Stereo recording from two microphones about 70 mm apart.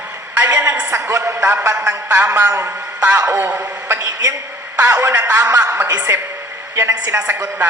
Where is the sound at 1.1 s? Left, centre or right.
Right.